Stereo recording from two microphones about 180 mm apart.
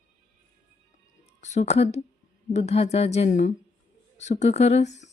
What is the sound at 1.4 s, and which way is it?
Speech, 40° left (ahead or behind).